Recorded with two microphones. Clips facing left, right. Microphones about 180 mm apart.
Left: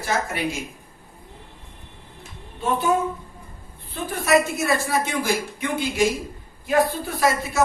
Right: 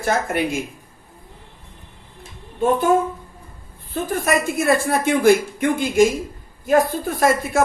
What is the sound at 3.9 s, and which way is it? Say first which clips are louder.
Speech: even; 45° right (ahead or behind).